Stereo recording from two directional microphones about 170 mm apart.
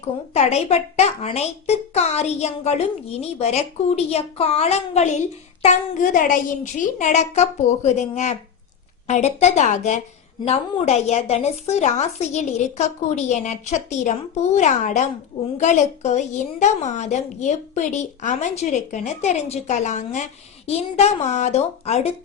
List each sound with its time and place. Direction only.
0.3 s a child's voice: 40° left (ahead or behind)
5.6 s a woman's voice: 50° left (ahead or behind)